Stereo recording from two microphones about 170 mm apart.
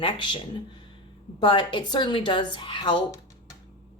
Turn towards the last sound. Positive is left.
turn(degrees=25)  # may be behind; listen again after turning